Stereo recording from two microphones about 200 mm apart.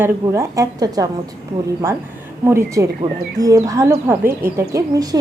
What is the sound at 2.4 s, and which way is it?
A woman's voice, 15° right (ahead or behind).